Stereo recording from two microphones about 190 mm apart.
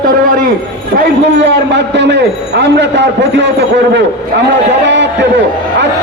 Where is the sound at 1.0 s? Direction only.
65° right (ahead or behind).